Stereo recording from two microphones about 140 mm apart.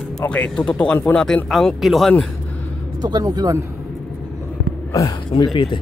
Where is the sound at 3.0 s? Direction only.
30° right (ahead or behind).